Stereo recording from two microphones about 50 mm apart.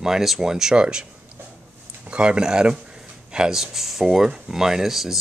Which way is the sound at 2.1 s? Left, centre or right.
Centre.